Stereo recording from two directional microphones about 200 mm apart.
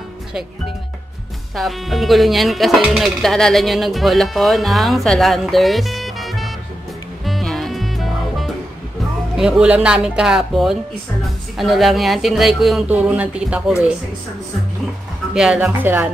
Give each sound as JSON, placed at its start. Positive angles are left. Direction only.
{"t": 1.5, "sound": "speech", "side_deg": 0}
{"t": 7.2, "sound": "music", "side_deg": 0}
{"t": 9.4, "sound": "speech", "side_deg": -5}
{"t": 15.3, "sound": "speech", "side_deg": -5}